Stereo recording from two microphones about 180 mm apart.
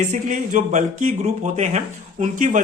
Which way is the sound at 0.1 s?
45° right (ahead or behind).